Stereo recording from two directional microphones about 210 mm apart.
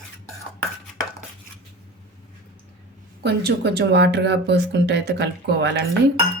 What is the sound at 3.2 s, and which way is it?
Speech, 50° right (ahead or behind).